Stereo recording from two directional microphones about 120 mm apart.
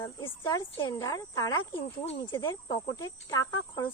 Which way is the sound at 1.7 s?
45° left (ahead or behind).